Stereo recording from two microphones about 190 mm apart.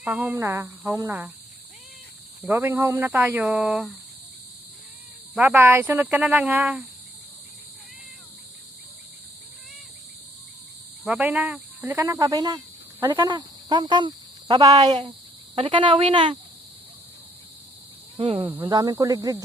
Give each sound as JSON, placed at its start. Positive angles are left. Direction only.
{"t": 0.0, "sound": "speech", "side_deg": -10}
{"t": 2.4, "sound": "speech", "side_deg": -10}
{"t": 5.3, "sound": "speech", "side_deg": -5}
{"t": 11.0, "sound": "speech", "side_deg": -5}
{"t": 18.2, "sound": "speech", "side_deg": -30}